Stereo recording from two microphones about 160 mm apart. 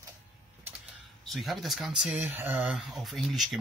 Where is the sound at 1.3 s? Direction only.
Centre (ahead or behind).